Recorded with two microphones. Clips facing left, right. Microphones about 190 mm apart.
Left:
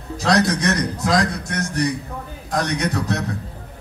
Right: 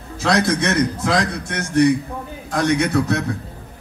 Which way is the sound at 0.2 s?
35° left (ahead or behind).